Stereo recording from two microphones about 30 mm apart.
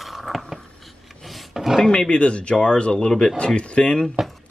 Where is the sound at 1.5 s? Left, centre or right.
Centre.